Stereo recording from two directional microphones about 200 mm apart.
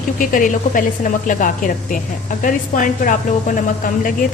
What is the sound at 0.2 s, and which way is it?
A woman's voice, 40° left (ahead or behind).